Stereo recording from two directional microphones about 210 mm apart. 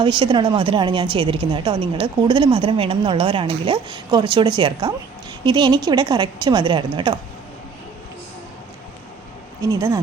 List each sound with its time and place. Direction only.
0.0 s a woman's voice: 25° right (ahead or behind)
9.6 s speech: 15° right (ahead or behind)